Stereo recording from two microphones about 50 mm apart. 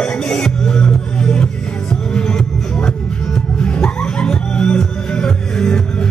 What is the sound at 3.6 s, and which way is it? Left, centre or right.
Music, centre.